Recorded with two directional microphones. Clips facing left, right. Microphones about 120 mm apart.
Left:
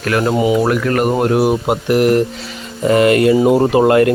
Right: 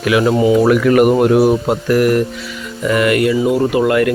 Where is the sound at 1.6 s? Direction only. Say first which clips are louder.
Even; 20° left (ahead or behind).